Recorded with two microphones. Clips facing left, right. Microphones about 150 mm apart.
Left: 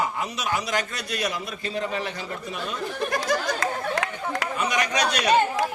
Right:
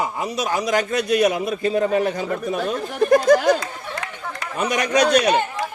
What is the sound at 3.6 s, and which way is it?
Chatter, 90° left.